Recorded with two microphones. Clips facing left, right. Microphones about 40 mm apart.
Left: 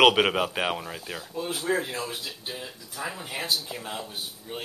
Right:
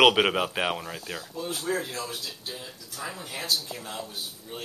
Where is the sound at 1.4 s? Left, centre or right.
Centre.